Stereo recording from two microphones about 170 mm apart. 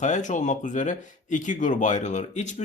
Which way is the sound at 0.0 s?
45° left (ahead or behind).